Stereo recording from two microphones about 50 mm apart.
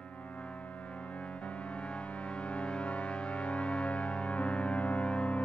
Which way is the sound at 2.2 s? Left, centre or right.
Left.